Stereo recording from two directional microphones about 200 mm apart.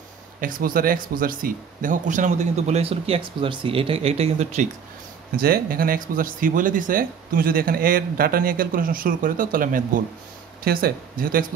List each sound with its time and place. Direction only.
0.4 s speech: 45° right (ahead or behind)
5.3 s speech: 50° right (ahead or behind)